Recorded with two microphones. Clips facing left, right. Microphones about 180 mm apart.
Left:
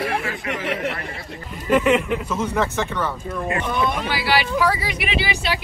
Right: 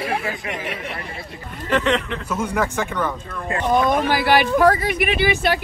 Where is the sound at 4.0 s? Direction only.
50° right (ahead or behind).